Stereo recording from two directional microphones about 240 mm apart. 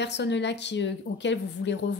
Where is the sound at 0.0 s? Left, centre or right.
Left.